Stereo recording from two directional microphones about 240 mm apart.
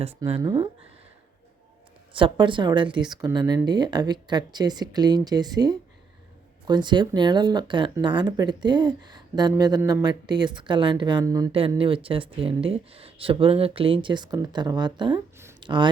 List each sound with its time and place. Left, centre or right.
0.0 s speech: right
2.1 s speech: right
15.1 s a sound: centre